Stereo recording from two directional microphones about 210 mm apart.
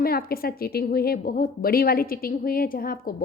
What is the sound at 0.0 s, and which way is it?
A woman's voice, 45° left (ahead or behind).